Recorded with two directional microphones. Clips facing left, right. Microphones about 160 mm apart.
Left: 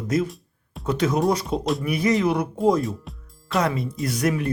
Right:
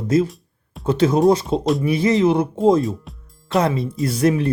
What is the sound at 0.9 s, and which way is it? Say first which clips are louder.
Speech: right 6 dB; 30° right (ahead or behind).